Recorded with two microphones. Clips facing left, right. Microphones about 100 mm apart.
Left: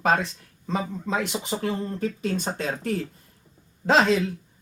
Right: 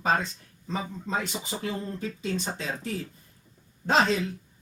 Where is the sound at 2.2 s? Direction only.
55° left (ahead or behind).